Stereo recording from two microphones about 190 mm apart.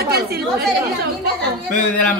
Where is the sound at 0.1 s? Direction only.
55° right (ahead or behind).